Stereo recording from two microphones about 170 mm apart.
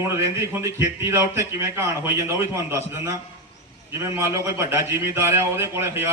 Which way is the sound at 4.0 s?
15° right (ahead or behind).